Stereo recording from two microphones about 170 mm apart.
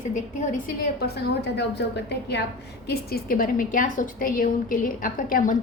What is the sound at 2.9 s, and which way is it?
A woman's voice, 65° left (ahead or behind).